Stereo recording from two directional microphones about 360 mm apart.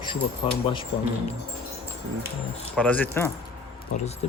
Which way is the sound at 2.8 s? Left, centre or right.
Centre.